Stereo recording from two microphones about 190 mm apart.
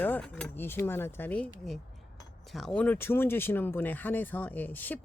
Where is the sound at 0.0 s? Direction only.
5° left (ahead or behind).